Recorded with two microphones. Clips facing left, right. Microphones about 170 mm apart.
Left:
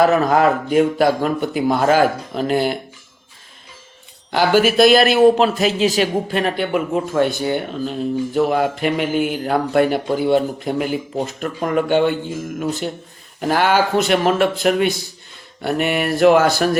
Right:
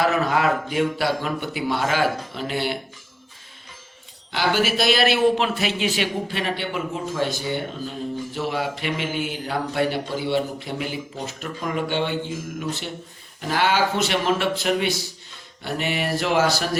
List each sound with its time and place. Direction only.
0.0 s speech: 45° left (ahead or behind)
4.3 s speech: 45° left (ahead or behind)